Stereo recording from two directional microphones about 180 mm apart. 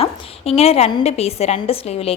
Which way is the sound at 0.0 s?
35° left (ahead or behind).